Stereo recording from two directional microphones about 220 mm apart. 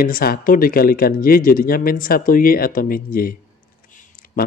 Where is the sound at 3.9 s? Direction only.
40° left (ahead or behind).